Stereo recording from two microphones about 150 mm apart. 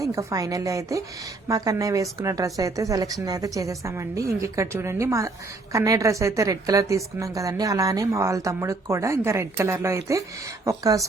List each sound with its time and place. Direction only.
0.0 s a woman's voice: 20° right (ahead or behind)